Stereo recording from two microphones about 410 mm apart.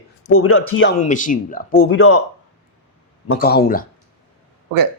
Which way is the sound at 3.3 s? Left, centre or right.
Left.